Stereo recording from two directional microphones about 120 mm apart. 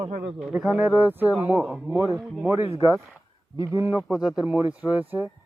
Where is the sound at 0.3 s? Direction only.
5° right (ahead or behind).